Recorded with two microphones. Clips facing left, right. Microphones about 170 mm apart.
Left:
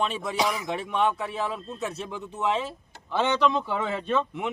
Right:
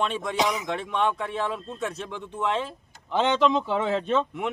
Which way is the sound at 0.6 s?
5° left (ahead or behind).